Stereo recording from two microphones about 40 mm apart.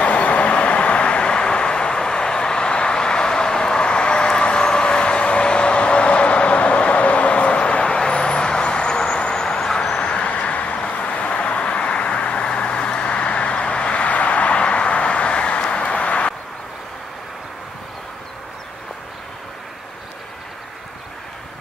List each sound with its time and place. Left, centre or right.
0.0 s vehicle: left; by 9.9 s centre
9.9 s vehicle: left